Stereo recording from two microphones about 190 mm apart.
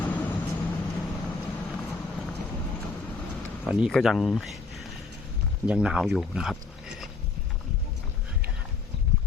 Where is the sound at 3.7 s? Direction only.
5° right (ahead or behind).